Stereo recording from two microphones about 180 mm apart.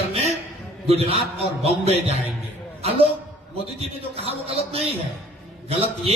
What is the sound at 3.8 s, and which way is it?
Speech, 35° right (ahead or behind).